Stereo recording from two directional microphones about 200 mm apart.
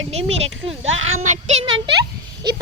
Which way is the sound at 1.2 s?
30° right (ahead or behind).